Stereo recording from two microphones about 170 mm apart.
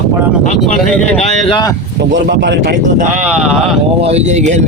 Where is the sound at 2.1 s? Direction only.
90° right.